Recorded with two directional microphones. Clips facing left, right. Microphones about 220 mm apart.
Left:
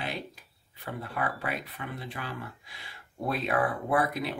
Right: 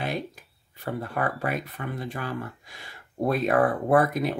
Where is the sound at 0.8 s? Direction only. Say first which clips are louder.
Right 5 dB; 45° right (ahead or behind).